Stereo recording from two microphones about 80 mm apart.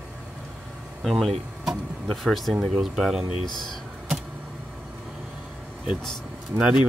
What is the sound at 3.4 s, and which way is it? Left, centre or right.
Speech, left.